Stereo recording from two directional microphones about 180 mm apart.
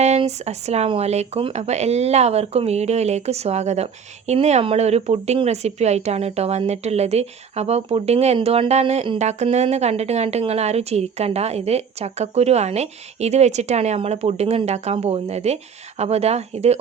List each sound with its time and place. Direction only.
0.0 s speech: 40° right (ahead or behind)